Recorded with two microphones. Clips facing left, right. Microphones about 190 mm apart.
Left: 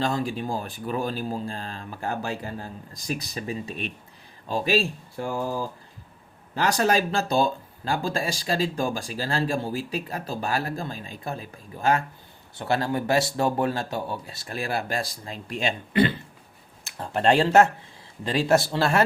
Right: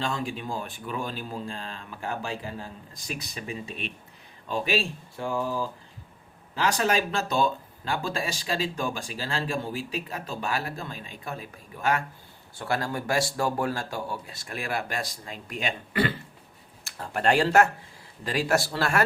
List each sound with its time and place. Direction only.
0.0 s speech: 35° left (ahead or behind)
6.6 s speech: 40° left (ahead or behind); by 19.0 s 25° left (ahead or behind)